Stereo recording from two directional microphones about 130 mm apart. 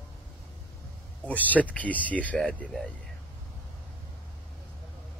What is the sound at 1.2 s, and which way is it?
Speech, 10° left (ahead or behind).